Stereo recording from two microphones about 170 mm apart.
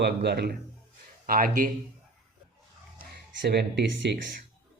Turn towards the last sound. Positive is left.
turn(degrees=-85)